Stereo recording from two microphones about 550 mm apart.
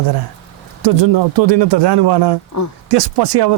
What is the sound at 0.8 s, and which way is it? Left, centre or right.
Speech, right.